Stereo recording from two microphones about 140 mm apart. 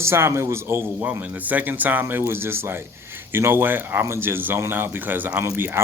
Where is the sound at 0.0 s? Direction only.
20° right (ahead or behind).